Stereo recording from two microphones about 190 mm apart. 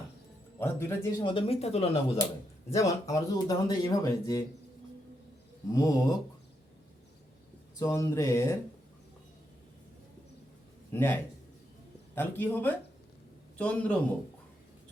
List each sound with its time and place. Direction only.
0.6 s speech: 15° left (ahead or behind)
1.2 s speech: 25° left (ahead or behind)
2.6 s speech: 15° left (ahead or behind)
5.7 s speech: 15° left (ahead or behind)
7.8 s speech: 15° left (ahead or behind)
10.9 s speech: 10° left (ahead or behind)